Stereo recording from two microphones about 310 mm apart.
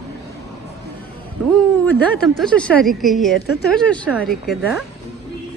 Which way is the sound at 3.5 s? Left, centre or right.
Left.